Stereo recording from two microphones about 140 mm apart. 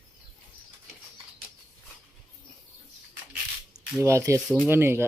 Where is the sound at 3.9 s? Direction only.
20° right (ahead or behind).